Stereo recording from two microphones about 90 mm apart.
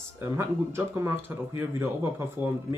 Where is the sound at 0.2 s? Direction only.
25° right (ahead or behind).